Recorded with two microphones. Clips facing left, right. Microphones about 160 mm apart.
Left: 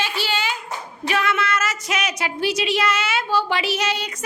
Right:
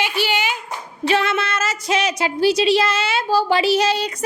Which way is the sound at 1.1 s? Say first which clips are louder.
Right 2 dB; 30° right (ahead or behind).